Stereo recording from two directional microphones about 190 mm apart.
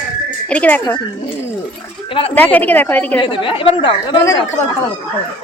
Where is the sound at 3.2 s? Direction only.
25° left (ahead or behind).